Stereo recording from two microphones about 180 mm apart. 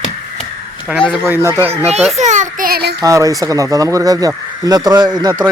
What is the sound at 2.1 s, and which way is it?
Speech, 40° right (ahead or behind).